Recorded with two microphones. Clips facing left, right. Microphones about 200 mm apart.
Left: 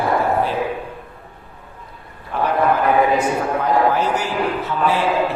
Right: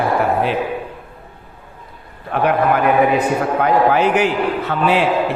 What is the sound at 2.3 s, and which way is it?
A man's voice, 65° right (ahead or behind).